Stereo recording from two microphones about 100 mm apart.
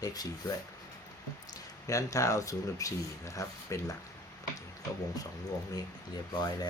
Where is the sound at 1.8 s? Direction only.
30° left (ahead or behind).